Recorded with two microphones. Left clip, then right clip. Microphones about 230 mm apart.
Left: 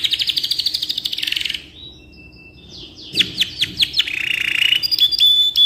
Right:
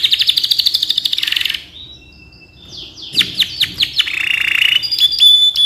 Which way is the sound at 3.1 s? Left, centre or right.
Centre.